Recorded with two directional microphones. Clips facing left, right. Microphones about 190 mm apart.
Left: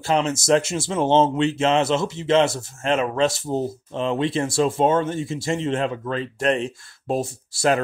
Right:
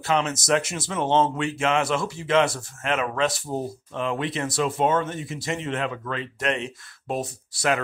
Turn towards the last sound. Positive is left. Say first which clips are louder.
# left 4 dB
turn(degrees=30)  # may be behind; listen again after turning